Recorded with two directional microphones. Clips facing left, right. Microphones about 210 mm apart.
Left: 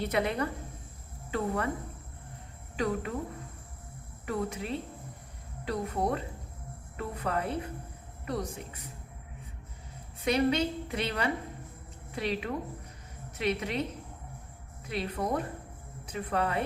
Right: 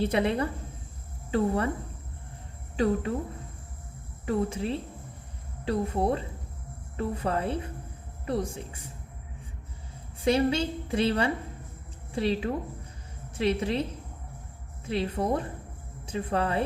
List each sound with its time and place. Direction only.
0.0 s a woman's voice: 30° right (ahead or behind)
2.7 s a woman's voice: 30° right (ahead or behind)
4.3 s a woman's voice: 30° right (ahead or behind)
10.2 s a woman's voice: 30° right (ahead or behind)
14.8 s a woman's voice: 30° right (ahead or behind)